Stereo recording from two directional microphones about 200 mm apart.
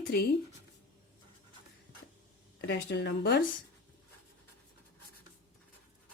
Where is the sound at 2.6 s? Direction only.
60° left (ahead or behind).